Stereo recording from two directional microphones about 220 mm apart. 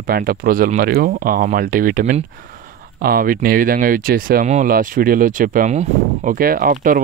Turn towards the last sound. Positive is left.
turn(degrees=-40)  # may be behind; listen again after turning